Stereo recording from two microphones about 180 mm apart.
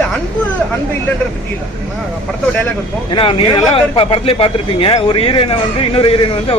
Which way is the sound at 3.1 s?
30° left (ahead or behind).